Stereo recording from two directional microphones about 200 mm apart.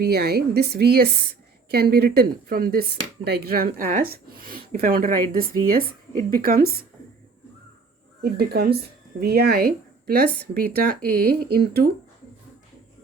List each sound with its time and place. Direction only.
0.0 s a woman's voice: 50° right (ahead or behind)
8.2 s a woman's voice: 50° right (ahead or behind)